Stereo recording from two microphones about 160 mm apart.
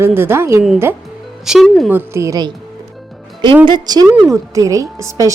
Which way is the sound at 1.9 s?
15° right (ahead or behind).